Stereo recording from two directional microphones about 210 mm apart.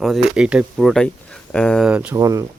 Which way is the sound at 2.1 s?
15° right (ahead or behind).